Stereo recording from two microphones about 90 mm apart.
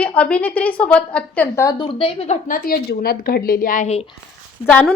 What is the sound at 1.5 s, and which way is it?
Speech, 30° left (ahead or behind).